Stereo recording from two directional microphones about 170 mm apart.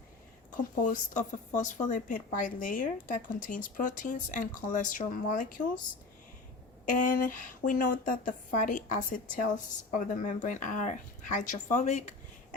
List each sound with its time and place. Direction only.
0.5 s a woman's voice: 50° left (ahead or behind)
6.8 s a woman's voice: 50° left (ahead or behind)